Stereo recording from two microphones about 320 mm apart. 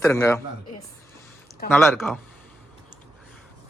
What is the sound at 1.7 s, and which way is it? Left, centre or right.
Speech, centre.